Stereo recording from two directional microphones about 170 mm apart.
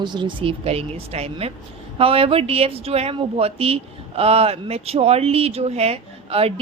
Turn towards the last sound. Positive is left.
turn(degrees=-35)  # may be behind; listen again after turning